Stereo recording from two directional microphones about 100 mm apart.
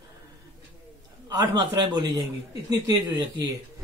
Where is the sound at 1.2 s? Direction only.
40° right (ahead or behind).